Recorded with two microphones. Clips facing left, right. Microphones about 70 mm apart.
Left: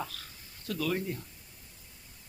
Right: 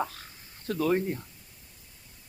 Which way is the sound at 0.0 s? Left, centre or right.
Right.